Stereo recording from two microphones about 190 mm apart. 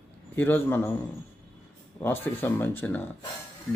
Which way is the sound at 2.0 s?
10° left (ahead or behind).